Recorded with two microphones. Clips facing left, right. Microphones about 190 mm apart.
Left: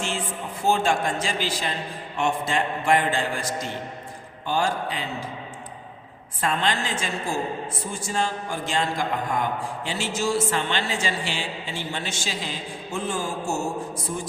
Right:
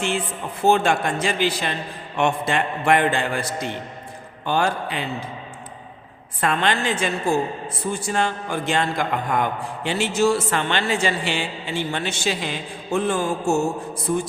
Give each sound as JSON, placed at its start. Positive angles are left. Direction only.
{"t": 0.6, "sound": "a man's voice", "side_deg": -65}
{"t": 6.4, "sound": "a man's voice", "side_deg": -65}